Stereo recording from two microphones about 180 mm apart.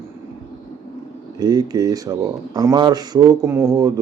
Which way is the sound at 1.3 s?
20° right (ahead or behind).